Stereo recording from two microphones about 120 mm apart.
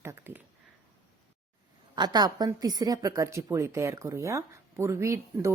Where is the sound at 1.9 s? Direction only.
35° right (ahead or behind).